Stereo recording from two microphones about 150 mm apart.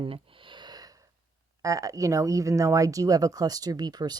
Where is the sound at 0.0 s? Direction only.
35° right (ahead or behind).